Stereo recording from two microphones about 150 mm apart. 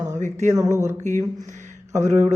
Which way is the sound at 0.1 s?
55° right (ahead or behind).